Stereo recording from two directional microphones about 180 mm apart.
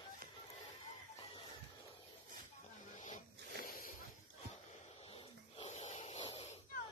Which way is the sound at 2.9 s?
40° left (ahead or behind).